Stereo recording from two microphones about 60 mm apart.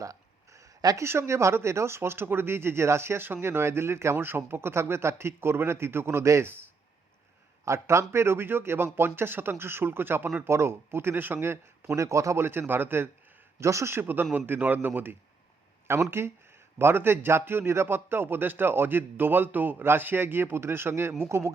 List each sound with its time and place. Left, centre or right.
0.0 s a sound: right
1.0 s speech: right
6.4 s a man's voice: right
7.6 s a man's voice: right
12.5 s a man's voice: right
13.6 s speech: right
13.9 s a man's voice: right